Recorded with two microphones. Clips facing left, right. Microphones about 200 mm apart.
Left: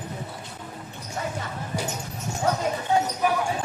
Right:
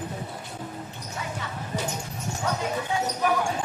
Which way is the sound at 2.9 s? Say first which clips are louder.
Left 7 dB; 40° left (ahead or behind).